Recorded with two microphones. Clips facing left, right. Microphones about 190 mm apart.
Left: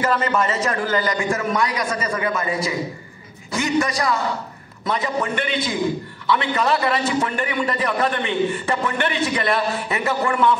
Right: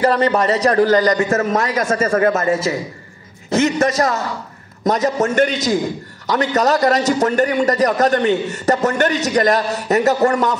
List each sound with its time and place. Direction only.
0.0 s a man's voice: 35° right (ahead or behind)
3.8 s a man's voice: 45° right (ahead or behind)